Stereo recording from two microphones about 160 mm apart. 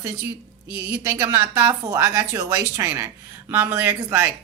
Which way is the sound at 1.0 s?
15° right (ahead or behind).